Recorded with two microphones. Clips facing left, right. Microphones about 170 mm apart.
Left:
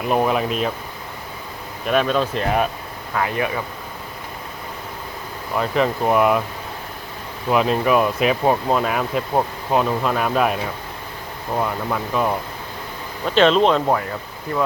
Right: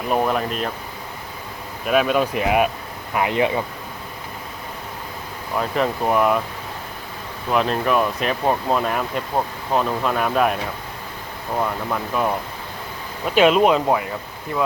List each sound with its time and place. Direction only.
0.1 s speech: 5° left (ahead or behind)
1.9 s speech: 10° right (ahead or behind)
5.5 s speech: centre (ahead or behind)
7.5 s speech: 5° left (ahead or behind)